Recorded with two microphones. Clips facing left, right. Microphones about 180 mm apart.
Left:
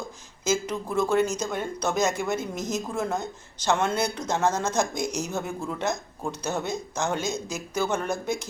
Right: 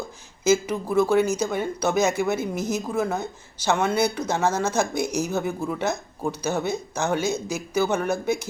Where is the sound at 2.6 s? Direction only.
65° right (ahead or behind).